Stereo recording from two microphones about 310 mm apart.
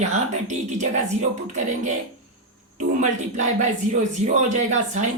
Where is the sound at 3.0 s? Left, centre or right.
Right.